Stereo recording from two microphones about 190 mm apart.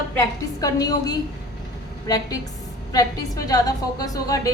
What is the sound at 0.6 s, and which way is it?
Speech, 20° left (ahead or behind).